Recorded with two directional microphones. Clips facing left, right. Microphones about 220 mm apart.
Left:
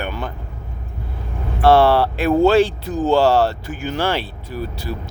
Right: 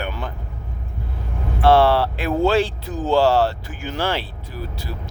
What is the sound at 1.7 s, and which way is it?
Speech, 45° left (ahead or behind).